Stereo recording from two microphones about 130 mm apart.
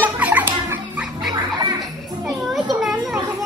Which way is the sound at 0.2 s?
15° right (ahead or behind).